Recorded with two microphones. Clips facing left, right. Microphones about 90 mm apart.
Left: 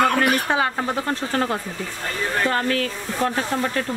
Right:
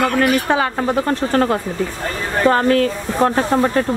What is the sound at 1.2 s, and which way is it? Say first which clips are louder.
Speech: right 7 dB; 60° right (ahead or behind).